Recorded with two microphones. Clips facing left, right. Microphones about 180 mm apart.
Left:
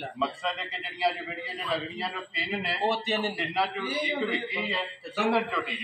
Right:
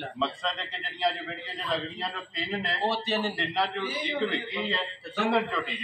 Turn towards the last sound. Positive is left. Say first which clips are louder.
# even
turn(degrees=5)  # may be behind; listen again after turning